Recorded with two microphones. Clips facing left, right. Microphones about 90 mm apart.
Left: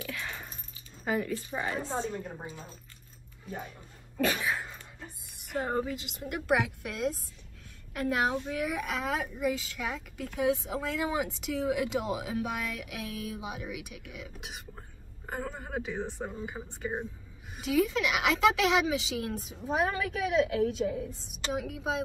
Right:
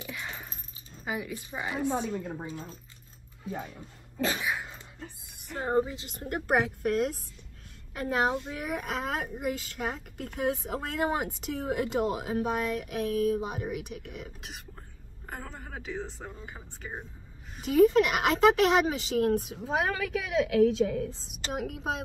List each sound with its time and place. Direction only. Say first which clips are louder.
0.0 s keys jangling: left 1 dB; 20° right (ahead or behind)
1.0 s a woman's voice: left 4 dB; 5° right (ahead or behind)
4.2 s a woman's voice: left 1 dB; 25° right (ahead or behind)
5.7 s a woman's voice: right 7 dB; 25° right (ahead or behind)
6.0 s speech: left 1 dB; 40° right (ahead or behind)
7.9 s speech: right 1 dB; 30° right (ahead or behind); by 14.3 s 45° right (ahead or behind)
15.2 s speech: left 4 dB; 5° left (ahead or behind)
17.6 s speech: right 6 dB; 40° right (ahead or behind)
19.4 s a woman's voice: even; 85° right
21.5 s speech: right 1 dB; 50° right (ahead or behind)